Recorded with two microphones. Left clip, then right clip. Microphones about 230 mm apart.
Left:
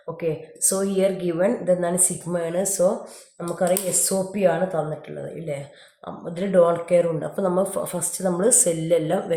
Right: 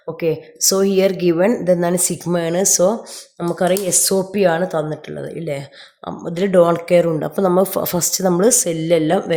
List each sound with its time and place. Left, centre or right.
0.2 s speech: right